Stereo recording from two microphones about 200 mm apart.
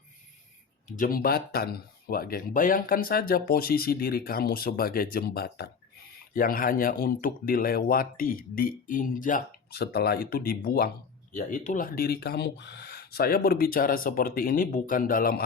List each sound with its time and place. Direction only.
0.9 s speech: 40° left (ahead or behind)